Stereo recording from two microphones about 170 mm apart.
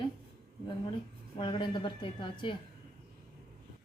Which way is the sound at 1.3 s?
30° left (ahead or behind).